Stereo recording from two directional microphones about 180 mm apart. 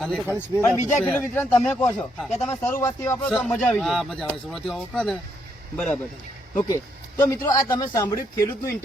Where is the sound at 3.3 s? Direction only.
Centre (ahead or behind).